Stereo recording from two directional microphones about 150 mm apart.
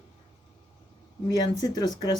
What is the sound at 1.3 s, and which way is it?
Speech, 25° left (ahead or behind).